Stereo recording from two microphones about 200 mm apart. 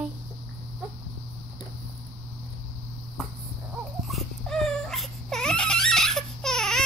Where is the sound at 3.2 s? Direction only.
Centre (ahead or behind).